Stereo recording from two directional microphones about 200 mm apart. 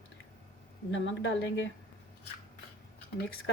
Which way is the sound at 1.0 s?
65° left (ahead or behind).